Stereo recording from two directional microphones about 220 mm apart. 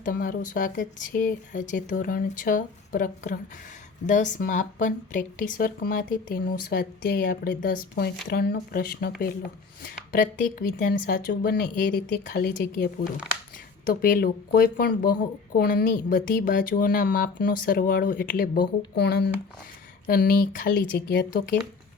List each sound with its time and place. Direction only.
0.0 s speech: 40° left (ahead or behind)